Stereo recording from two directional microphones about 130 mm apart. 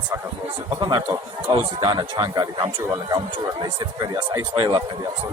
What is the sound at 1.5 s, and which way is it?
Speech, 35° right (ahead or behind).